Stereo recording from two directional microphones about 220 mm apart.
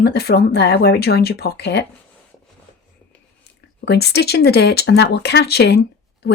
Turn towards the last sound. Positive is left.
turn(degrees=50)  # may be behind; listen again after turning